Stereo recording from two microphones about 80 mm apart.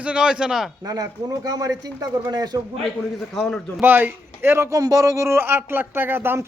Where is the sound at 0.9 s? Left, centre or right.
Right.